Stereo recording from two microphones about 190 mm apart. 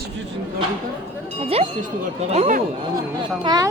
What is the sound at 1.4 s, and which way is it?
Speech, 35° right (ahead or behind).